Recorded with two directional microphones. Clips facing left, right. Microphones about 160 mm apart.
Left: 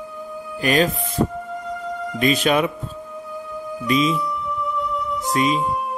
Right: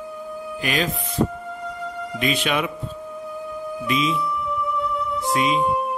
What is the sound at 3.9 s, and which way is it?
Speech, 40° left (ahead or behind).